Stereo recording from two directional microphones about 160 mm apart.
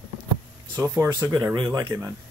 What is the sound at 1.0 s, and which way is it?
Speech, 20° right (ahead or behind).